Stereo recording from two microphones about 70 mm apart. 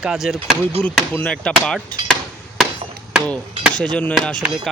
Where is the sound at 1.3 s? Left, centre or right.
Centre.